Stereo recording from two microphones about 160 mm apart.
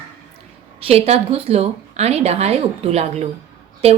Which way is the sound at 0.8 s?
40° right (ahead or behind).